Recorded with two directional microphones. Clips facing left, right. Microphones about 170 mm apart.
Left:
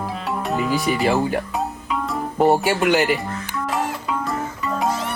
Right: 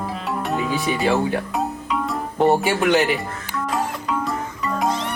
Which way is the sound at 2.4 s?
Centre (ahead or behind).